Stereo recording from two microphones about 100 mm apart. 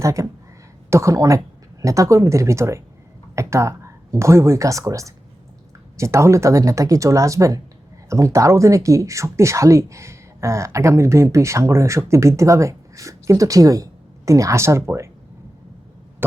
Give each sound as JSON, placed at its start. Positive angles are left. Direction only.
{"t": 0.0, "sound": "speech", "side_deg": -30}